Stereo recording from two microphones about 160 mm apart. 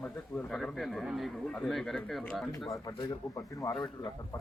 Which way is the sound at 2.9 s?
25° left (ahead or behind).